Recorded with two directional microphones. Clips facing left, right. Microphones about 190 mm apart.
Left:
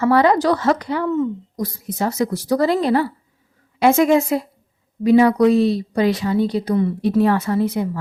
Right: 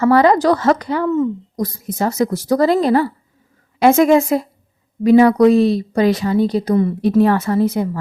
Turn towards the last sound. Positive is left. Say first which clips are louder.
# right 3 dB
turn(degrees=-45)  # may be behind; listen again after turning